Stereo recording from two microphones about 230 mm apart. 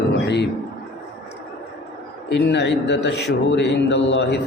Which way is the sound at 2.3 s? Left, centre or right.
Left.